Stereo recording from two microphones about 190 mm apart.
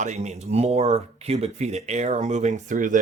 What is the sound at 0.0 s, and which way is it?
Speech, 35° right (ahead or behind).